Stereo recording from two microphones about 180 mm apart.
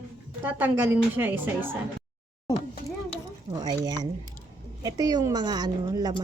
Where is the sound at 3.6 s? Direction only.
25° right (ahead or behind).